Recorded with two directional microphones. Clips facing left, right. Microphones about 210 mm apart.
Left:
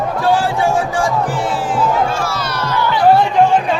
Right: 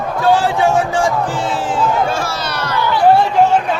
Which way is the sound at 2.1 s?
80° right.